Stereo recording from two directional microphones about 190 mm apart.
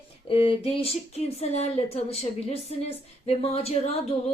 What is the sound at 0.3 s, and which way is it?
Speech, 30° left (ahead or behind).